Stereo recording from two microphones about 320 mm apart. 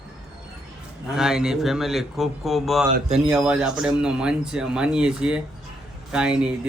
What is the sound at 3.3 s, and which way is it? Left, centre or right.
Speech, centre.